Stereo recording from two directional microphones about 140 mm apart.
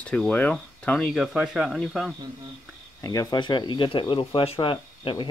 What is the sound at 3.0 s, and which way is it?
Speech, 25° left (ahead or behind).